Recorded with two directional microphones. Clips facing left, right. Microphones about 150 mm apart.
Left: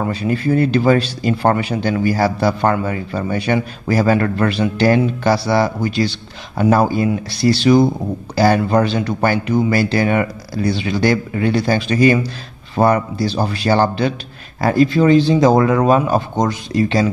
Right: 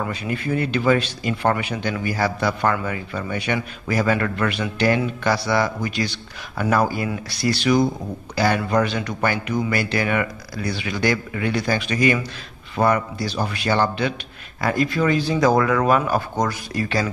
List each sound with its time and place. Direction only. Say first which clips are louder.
0.0 s speech: left 7 dB; 35° left (ahead or behind)